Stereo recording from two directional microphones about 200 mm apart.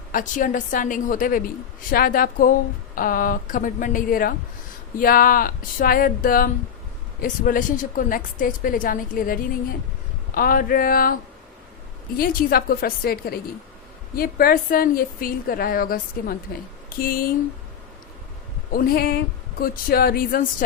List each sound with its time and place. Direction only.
0.1 s a woman's voice: 40° left (ahead or behind)
18.7 s a woman's voice: 50° left (ahead or behind)